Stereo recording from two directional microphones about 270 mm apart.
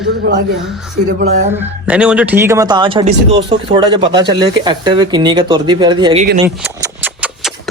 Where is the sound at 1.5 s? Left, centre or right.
Centre.